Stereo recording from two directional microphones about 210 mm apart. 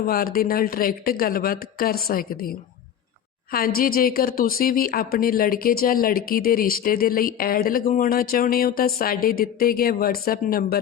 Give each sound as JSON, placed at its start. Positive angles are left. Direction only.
{"t": 0.0, "sound": "a woman's voice", "side_deg": 45}